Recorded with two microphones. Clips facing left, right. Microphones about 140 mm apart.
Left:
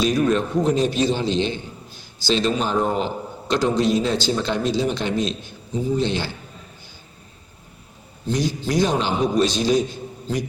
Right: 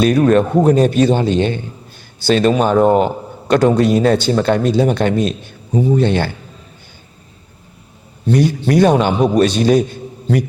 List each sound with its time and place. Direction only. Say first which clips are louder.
0.0 s a man's voice: right 7 dB; 55° right (ahead or behind)
8.3 s a man's voice: right 8 dB; 60° right (ahead or behind)